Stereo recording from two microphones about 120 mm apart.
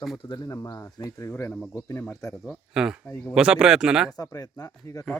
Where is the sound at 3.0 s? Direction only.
10° left (ahead or behind).